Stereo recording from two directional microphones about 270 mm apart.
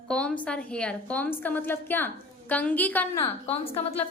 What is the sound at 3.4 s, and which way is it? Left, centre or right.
Speech, left.